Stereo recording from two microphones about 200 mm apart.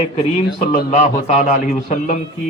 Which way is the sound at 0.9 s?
35° left (ahead or behind).